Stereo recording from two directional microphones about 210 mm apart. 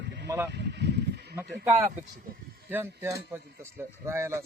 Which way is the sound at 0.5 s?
55° right (ahead or behind).